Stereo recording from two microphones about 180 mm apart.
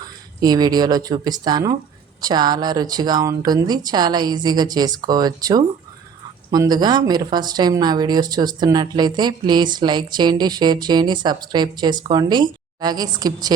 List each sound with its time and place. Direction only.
0.4 s speech: 20° right (ahead or behind)